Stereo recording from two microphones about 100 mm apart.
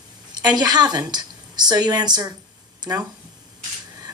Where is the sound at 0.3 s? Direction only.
45° right (ahead or behind).